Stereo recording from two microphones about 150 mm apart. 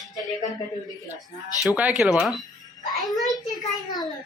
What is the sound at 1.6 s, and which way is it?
Speech, 10° right (ahead or behind).